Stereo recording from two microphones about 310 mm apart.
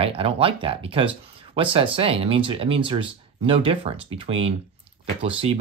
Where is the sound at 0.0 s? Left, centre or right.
Centre.